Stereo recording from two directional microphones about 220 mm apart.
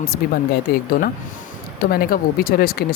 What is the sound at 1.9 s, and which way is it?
Speech, 40° left (ahead or behind).